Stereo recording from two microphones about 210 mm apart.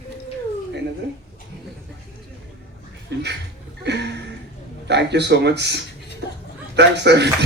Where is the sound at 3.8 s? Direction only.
55° right (ahead or behind).